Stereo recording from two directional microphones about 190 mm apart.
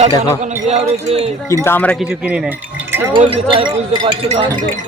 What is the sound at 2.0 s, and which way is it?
Speech, 5° right (ahead or behind).